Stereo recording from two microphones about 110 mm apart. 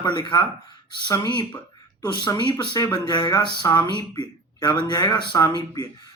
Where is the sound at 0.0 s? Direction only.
45° left (ahead or behind).